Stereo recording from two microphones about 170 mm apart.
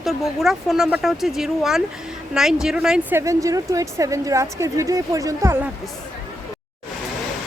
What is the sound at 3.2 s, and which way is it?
A woman's voice, 20° right (ahead or behind).